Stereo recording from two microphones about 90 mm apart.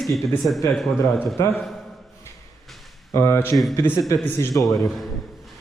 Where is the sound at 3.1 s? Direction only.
30° left (ahead or behind).